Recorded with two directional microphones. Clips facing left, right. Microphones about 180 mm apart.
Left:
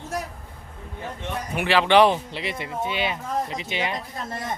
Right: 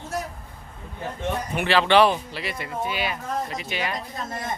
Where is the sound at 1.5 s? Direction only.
10° left (ahead or behind).